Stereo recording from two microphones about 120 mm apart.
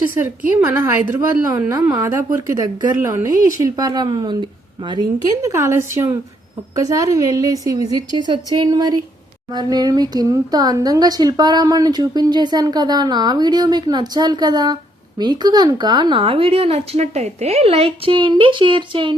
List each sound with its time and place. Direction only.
0.1 s a woman's voice: 15° right (ahead or behind); by 5.0 s 40° right (ahead or behind)
5.4 s a woman's voice: 25° right (ahead or behind); by 19.1 s 45° right (ahead or behind)